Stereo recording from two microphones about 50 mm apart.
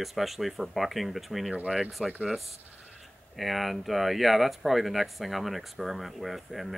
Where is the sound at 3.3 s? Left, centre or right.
Centre.